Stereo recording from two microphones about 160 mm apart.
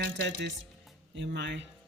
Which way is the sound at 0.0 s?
90° right.